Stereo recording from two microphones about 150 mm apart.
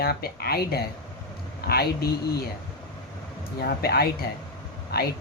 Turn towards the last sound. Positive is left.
turn(degrees=90)